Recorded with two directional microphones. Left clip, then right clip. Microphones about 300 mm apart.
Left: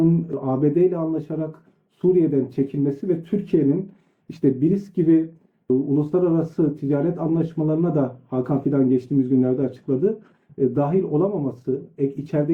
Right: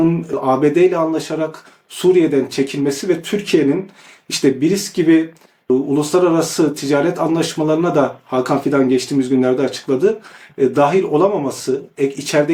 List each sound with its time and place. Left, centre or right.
0.0 s speech: centre
5.6 s speech: right
6.1 s speech: centre